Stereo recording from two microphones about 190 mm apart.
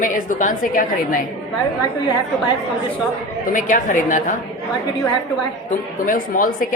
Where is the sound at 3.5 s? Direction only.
45° left (ahead or behind).